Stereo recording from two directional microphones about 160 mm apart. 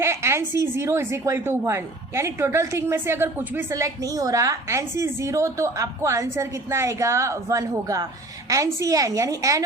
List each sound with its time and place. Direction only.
0.0 s a woman's voice: 15° right (ahead or behind)